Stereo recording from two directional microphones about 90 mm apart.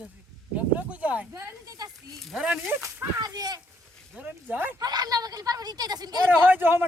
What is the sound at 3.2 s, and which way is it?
Speech, 45° right (ahead or behind).